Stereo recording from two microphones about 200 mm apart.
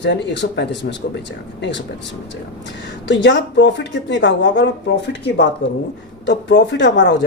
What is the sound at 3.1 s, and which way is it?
Speech, 60° left (ahead or behind).